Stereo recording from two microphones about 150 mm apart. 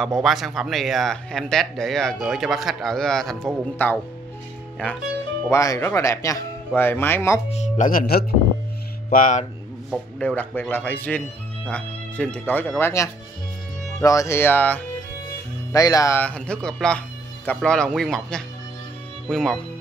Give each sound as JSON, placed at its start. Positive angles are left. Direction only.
{"t": 0.0, "sound": "speech", "side_deg": 0}
{"t": 5.5, "sound": "speech", "side_deg": 20}
{"t": 7.4, "sound": "speech", "side_deg": 50}
{"t": 9.1, "sound": "speech", "side_deg": 60}
{"t": 9.8, "sound": "speech", "side_deg": 5}
{"t": 15.7, "sound": "speech", "side_deg": 25}
{"t": 16.2, "sound": "speech", "side_deg": 10}